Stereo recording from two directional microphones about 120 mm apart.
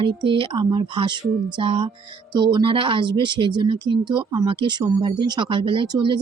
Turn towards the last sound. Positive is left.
turn(degrees=-40)  # may be behind; listen again after turning